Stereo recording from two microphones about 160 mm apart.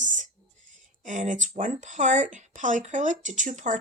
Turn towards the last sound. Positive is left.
turn(degrees=-50)  # may be behind; listen again after turning